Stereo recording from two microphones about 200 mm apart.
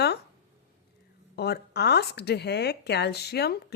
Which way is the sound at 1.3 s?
55° left (ahead or behind).